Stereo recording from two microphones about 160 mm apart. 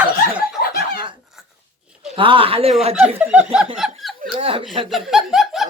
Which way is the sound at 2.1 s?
35° right (ahead or behind).